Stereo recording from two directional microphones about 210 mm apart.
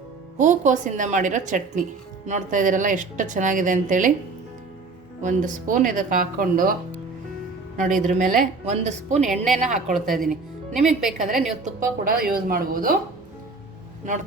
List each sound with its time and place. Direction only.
0.3 s a woman's voice: 35° right (ahead or behind)
5.2 s a woman's voice: 40° right (ahead or behind)
7.8 s a woman's voice: 35° right (ahead or behind)
10.1 s a woman's voice: centre (ahead or behind)
11.6 s speech: 45° right (ahead or behind)